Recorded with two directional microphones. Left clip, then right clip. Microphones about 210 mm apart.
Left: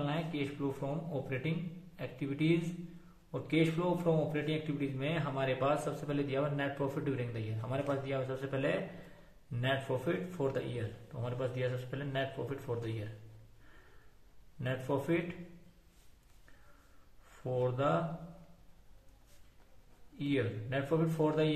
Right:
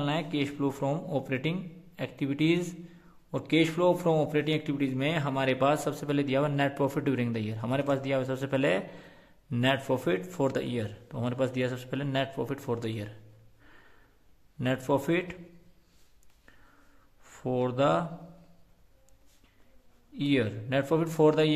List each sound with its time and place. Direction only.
0.0 s a man's voice: 55° right (ahead or behind)
14.6 s a man's voice: 55° right (ahead or behind)
17.4 s speech: 55° right (ahead or behind)
20.2 s a man's voice: 55° right (ahead or behind)